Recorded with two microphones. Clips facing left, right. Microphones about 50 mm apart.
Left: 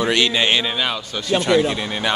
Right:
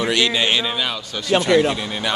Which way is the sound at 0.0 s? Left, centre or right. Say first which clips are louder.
Left 1 dB; left.